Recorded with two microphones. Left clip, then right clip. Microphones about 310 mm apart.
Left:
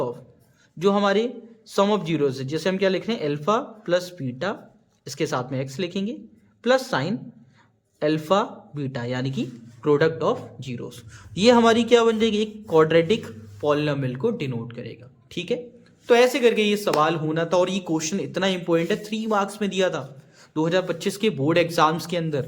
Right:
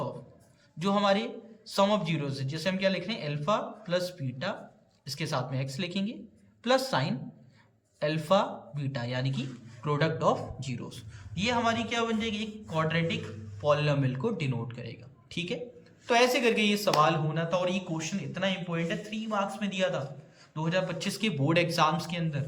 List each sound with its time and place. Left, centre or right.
0.8 s a man's voice: centre